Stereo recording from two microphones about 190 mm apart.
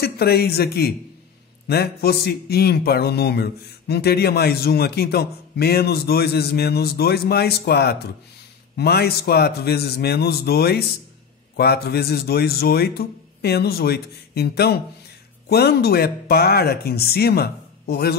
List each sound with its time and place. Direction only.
0.0 s a man's voice: 55° left (ahead or behind)